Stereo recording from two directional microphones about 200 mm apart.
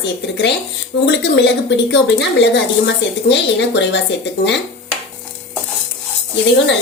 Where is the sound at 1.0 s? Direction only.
60° left (ahead or behind).